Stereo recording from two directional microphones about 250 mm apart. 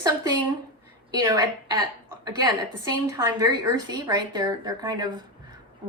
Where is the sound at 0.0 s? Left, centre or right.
Centre.